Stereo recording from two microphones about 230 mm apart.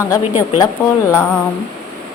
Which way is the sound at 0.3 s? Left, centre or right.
Left.